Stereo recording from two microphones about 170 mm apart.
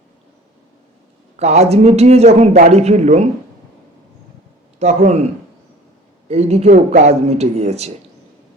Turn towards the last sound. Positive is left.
turn(degrees=-40)  # may be behind; listen again after turning